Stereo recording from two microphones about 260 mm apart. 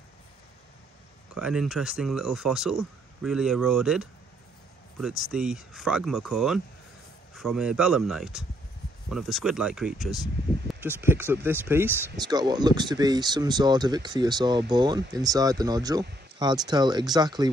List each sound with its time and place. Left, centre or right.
1.3 s speech: centre